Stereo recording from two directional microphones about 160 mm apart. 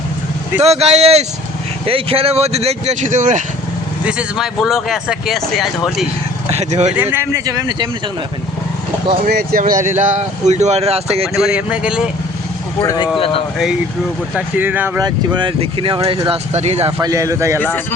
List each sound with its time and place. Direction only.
0.6 s speech: 40° right (ahead or behind)
4.0 s speech: 5° right (ahead or behind)
6.5 s speech: 45° right (ahead or behind)
6.9 s speech: 10° right (ahead or behind)
9.2 s speech: 65° right (ahead or behind); by 11.3 s 40° right (ahead or behind)
11.4 s speech: 5° right (ahead or behind)
13.1 s speech: 35° left (ahead or behind)
14.3 s speech: 10° right (ahead or behind)
15.0 s speech: 30° right (ahead or behind)
16.5 s speech: 45° right (ahead or behind)
17.0 s speech: 20° right (ahead or behind)